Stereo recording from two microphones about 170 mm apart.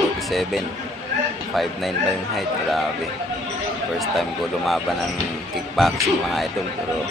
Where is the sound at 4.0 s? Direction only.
Centre (ahead or behind).